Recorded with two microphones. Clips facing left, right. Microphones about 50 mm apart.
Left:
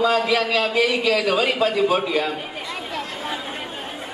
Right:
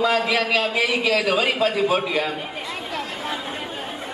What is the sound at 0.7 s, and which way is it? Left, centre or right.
A man's voice, centre.